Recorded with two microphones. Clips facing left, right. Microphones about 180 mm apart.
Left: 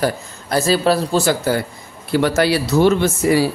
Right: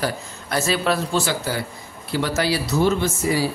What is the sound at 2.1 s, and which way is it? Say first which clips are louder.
A man's voice: left 6 dB; 60° left (ahead or behind).